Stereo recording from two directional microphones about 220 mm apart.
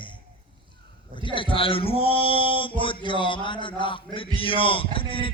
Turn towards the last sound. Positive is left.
turn(degrees=25)  # may be behind; listen again after turning